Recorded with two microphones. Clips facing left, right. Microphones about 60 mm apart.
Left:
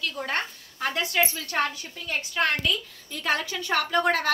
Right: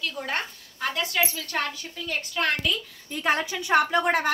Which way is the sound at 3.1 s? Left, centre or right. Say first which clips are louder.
Right 2 dB; right.